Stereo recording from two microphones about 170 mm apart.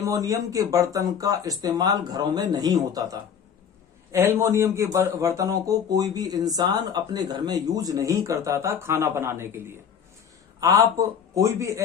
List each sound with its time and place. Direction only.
0.0 s speech: 20° right (ahead or behind)